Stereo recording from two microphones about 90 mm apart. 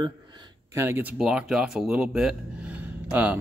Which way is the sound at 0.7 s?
25° right (ahead or behind).